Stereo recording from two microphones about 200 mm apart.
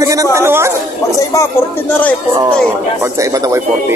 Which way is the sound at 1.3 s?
15° left (ahead or behind).